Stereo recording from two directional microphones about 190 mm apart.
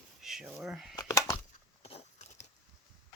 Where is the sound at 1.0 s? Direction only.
20° left (ahead or behind).